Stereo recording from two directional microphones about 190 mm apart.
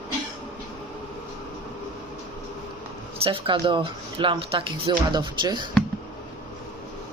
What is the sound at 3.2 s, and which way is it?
Speech, 30° right (ahead or behind).